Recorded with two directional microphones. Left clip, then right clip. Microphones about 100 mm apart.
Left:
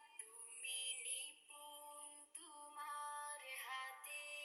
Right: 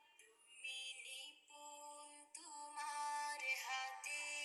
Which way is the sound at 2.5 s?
55° right (ahead or behind).